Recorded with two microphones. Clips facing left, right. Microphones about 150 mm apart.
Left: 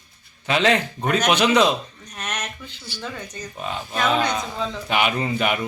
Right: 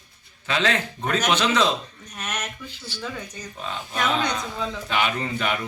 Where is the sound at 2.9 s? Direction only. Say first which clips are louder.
Left 1 dB; 10° left (ahead or behind).